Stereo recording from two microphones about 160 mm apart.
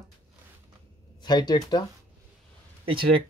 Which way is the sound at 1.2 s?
25° left (ahead or behind).